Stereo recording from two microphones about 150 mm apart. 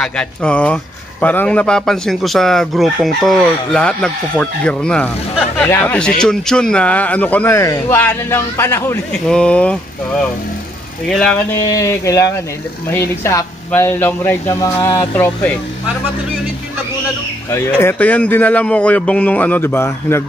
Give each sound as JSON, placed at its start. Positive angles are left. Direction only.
{"t": 0.0, "sound": "speech", "side_deg": 5}
{"t": 9.3, "sound": "speech", "side_deg": 5}
{"t": 11.1, "sound": "speech", "side_deg": 5}
{"t": 11.5, "sound": "a sound", "side_deg": 20}
{"t": 13.7, "sound": "speech", "side_deg": 15}
{"t": 17.5, "sound": "speech", "side_deg": 20}